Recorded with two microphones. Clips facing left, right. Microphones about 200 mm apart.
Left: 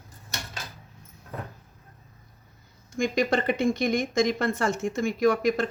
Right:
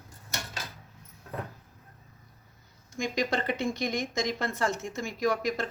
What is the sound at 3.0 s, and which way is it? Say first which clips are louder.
Speech: left 5 dB; 55° left (ahead or behind).